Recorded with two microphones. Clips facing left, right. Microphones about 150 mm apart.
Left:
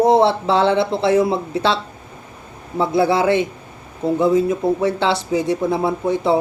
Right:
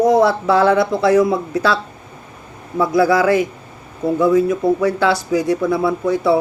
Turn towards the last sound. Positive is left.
turn(degrees=25)  # may be behind; listen again after turning